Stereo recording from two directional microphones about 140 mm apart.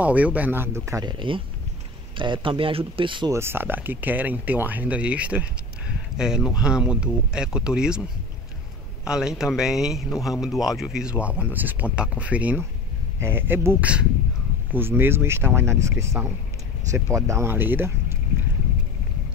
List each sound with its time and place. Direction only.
0.0 s speech: 10° right (ahead or behind)
1.0 s speech: 35° right (ahead or behind)
3.3 s speech: 20° right (ahead or behind)